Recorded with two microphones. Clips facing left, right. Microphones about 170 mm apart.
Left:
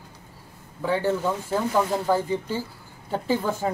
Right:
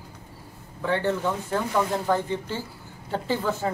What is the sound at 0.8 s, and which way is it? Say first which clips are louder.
Speech: left 1 dB; 10° left (ahead or behind).